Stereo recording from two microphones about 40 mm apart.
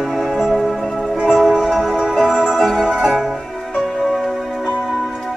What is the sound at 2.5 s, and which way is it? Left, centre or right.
Music, centre.